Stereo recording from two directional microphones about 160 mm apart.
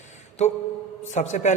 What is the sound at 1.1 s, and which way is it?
Speech, 50° left (ahead or behind).